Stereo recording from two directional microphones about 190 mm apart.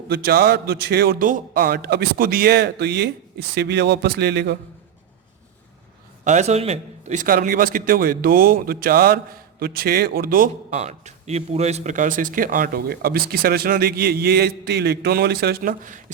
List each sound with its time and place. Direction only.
0.1 s a man's voice: 55° right (ahead or behind)
6.2 s a man's voice: 35° right (ahead or behind)